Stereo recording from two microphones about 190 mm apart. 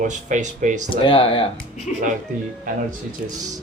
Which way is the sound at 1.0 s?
30° left (ahead or behind).